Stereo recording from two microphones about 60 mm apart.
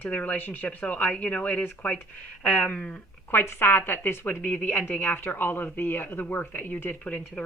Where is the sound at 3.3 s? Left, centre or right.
Left.